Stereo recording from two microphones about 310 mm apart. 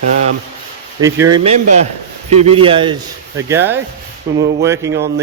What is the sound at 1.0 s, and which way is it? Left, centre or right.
Speech, centre.